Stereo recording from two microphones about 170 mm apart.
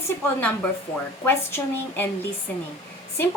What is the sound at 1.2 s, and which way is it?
Speech, 15° left (ahead or behind).